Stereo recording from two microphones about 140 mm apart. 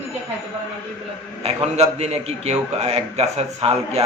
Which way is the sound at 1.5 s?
50° right (ahead or behind).